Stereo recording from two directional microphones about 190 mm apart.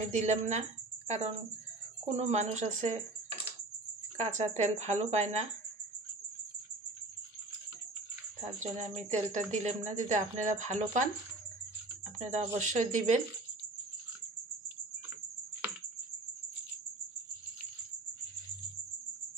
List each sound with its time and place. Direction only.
0.1 s a woman's voice: 35° right (ahead or behind)
8.5 s a woman's voice: 35° right (ahead or behind)
12.2 s a woman's voice: 40° right (ahead or behind)